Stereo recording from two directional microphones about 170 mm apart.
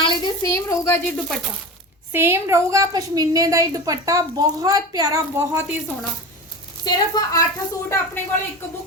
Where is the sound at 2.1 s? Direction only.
15° right (ahead or behind).